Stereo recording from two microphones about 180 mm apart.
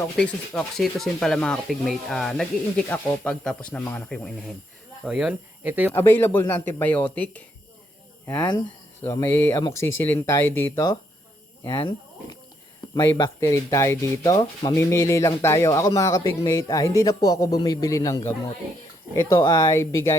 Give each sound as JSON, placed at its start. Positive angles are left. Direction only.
{"t": 0.0, "sound": "speech", "side_deg": 5}
{"t": 5.0, "sound": "speech", "side_deg": -5}
{"t": 5.9, "sound": "speech", "side_deg": 15}
{"t": 9.0, "sound": "speech", "side_deg": 15}